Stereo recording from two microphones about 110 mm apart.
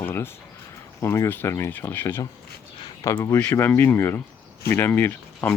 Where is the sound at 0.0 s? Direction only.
20° left (ahead or behind).